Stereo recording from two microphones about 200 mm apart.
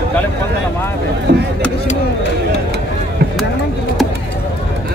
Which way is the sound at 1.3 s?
55° right (ahead or behind).